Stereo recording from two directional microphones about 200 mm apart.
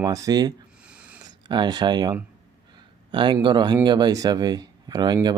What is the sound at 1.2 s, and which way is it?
Speech, 20° right (ahead or behind).